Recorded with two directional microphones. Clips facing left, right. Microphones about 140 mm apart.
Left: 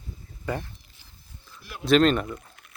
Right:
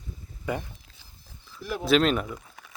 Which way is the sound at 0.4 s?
10° right (ahead or behind).